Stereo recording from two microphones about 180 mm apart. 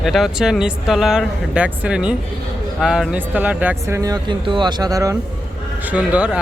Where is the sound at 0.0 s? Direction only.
Centre (ahead or behind); by 5.1 s 20° right (ahead or behind).